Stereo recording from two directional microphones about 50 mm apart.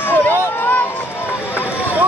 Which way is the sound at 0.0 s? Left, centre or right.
Left.